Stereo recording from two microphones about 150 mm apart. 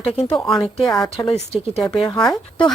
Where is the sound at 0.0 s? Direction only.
45° left (ahead or behind).